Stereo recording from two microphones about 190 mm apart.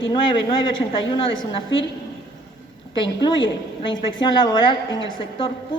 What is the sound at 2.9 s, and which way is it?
A woman's voice, 25° left (ahead or behind).